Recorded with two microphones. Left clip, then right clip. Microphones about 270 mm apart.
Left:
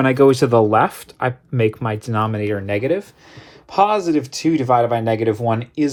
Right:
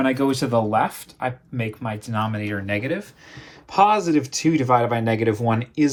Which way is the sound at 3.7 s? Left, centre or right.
Centre.